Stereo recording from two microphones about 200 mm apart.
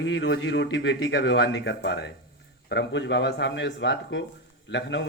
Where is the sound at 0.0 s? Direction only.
60° left (ahead or behind).